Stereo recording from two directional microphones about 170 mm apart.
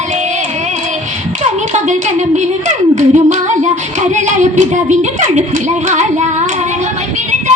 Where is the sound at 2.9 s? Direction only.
45° right (ahead or behind).